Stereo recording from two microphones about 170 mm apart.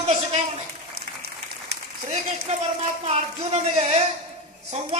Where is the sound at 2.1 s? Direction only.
40° right (ahead or behind).